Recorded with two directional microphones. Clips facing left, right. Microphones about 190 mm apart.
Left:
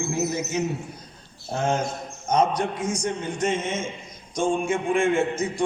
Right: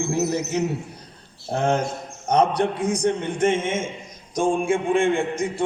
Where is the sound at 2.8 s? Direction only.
35° right (ahead or behind).